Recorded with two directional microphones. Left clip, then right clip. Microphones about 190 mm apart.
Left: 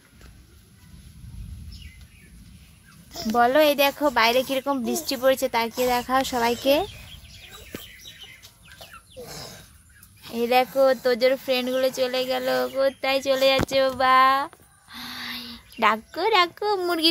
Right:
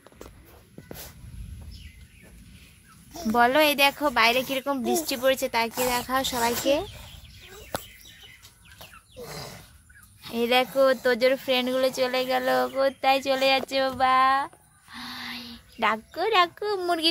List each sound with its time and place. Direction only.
3.1 s speech: 5° right (ahead or behind); by 6.9 s 15° left (ahead or behind)
9.2 s bird: 55° right (ahead or behind)
10.3 s speech: 5° right (ahead or behind)